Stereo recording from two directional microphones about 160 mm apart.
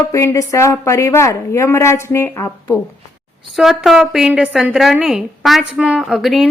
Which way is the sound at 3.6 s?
Centre (ahead or behind).